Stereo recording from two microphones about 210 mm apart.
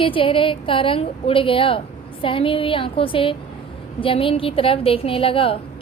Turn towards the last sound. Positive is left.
turn(degrees=25)  # may be behind; listen again after turning